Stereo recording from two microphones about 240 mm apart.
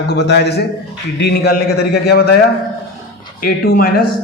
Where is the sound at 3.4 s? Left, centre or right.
Left.